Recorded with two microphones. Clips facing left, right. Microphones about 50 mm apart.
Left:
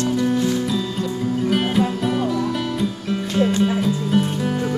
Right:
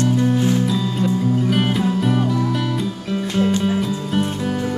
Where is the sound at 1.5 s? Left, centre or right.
Centre.